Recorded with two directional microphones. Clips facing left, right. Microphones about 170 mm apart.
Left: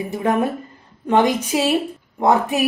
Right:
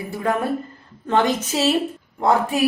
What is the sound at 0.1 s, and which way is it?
A woman's voice, 20° left (ahead or behind).